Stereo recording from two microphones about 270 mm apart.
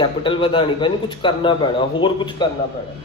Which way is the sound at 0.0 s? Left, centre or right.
Centre.